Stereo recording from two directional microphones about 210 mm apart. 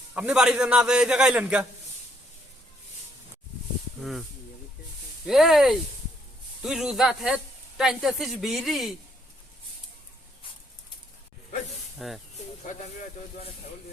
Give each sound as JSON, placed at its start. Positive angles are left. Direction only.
{"t": 0.1, "sound": "speech", "side_deg": -5}
{"t": 4.0, "sound": "speech", "side_deg": 0}
{"t": 11.9, "sound": "speech", "side_deg": 0}
{"t": 12.6, "sound": "speech", "side_deg": 35}